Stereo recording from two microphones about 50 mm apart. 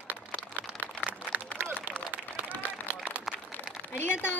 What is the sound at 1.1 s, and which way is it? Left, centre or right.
Run, right.